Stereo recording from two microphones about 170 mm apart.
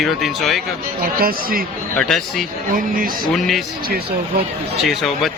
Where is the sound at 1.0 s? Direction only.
60° right (ahead or behind).